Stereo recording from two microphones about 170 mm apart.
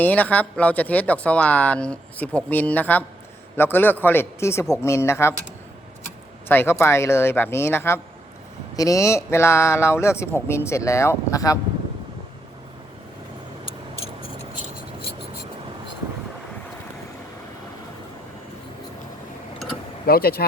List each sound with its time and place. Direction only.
0.0 s speech: 10° left (ahead or behind)
6.5 s speech: 10° left (ahead or behind)
20.1 s speech: 65° left (ahead or behind)